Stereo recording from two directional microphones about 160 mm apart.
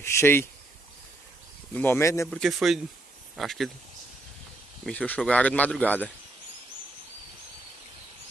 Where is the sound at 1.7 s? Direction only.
10° left (ahead or behind).